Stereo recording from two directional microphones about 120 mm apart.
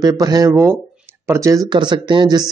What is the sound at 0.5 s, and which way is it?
Speech, 20° right (ahead or behind).